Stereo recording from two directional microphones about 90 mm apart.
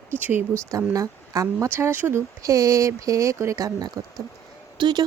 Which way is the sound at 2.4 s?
40° right (ahead or behind).